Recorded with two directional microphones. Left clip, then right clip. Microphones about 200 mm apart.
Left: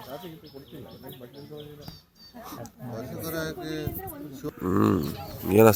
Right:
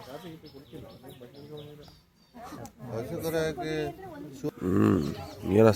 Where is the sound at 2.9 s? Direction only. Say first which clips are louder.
Right 3 dB; 40° right (ahead or behind).